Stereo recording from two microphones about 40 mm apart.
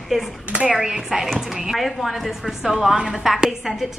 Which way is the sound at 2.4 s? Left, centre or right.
Centre.